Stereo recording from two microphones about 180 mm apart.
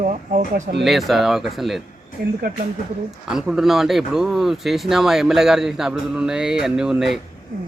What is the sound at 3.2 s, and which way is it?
Speech, 5° right (ahead or behind).